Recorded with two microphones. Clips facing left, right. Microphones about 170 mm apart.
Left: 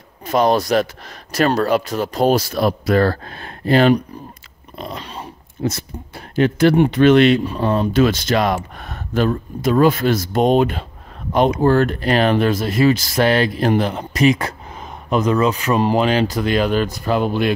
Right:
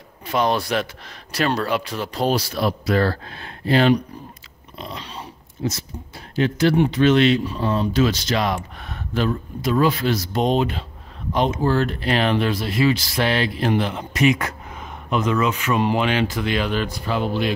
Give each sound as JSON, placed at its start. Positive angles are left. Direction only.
{"t": 0.3, "sound": "speech", "side_deg": 40}